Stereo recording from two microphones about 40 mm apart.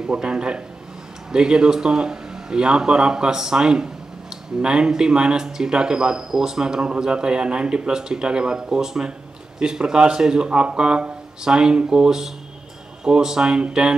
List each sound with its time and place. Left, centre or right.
0.0 s speech: right